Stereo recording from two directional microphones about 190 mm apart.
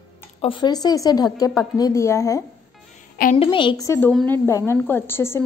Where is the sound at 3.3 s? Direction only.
25° left (ahead or behind).